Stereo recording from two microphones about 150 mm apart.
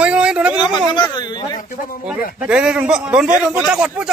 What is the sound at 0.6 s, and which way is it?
Speech, 30° left (ahead or behind).